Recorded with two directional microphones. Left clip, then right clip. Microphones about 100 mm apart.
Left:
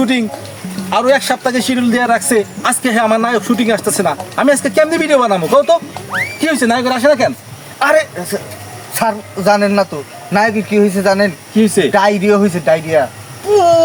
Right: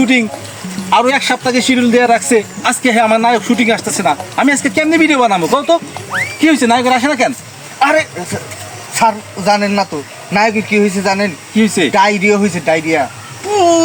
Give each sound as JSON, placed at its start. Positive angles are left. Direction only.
{"t": 0.0, "sound": "a man's voice", "side_deg": 40}
{"t": 6.1, "sound": "speech", "side_deg": 0}
{"t": 6.4, "sound": "a man's voice", "side_deg": 40}